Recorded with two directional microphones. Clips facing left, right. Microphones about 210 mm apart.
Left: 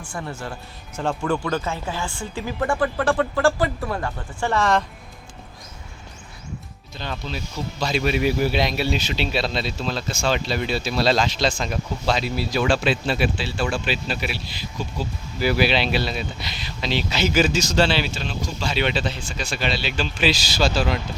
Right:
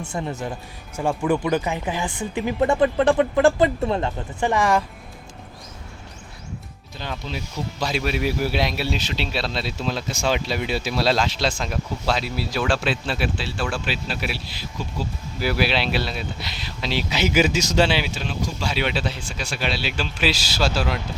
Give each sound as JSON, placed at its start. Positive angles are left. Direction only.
{"t": 0.0, "sound": "speech", "side_deg": -20}
{"t": 7.0, "sound": "speech", "side_deg": -10}
{"t": 9.7, "sound": "speech", "side_deg": -15}